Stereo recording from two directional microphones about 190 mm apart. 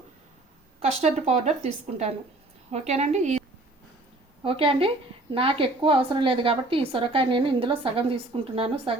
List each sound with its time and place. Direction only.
0.8 s a woman's voice: 35° right (ahead or behind)
4.4 s a woman's voice: 30° right (ahead or behind)